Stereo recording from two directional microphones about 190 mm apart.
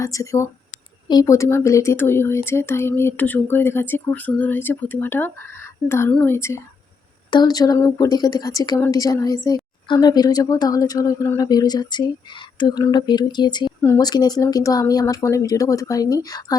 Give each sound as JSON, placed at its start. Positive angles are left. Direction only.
{"t": 0.0, "sound": "a woman's voice", "side_deg": 15}